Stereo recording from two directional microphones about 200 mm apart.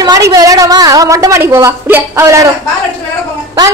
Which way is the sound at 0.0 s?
20° right (ahead or behind).